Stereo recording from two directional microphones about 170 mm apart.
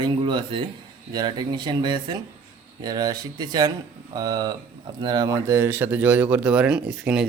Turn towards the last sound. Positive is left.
turn(degrees=-5)  # may be behind; listen again after turning